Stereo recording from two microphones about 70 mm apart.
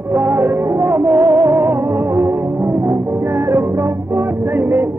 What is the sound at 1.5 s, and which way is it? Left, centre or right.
Music, right.